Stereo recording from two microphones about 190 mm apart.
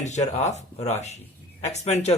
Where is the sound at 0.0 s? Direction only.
40° left (ahead or behind).